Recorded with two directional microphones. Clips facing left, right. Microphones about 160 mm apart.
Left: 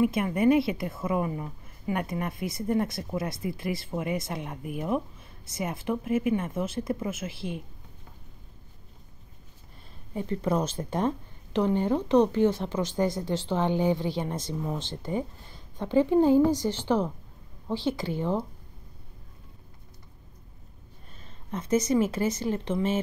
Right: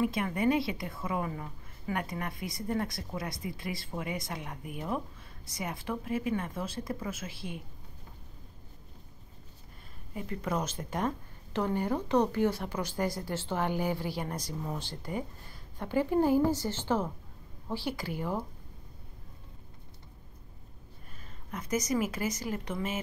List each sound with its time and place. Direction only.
0.0 s a woman's voice: 20° left (ahead or behind)
10.1 s a woman's voice: 30° left (ahead or behind)
21.2 s speech: 25° left (ahead or behind)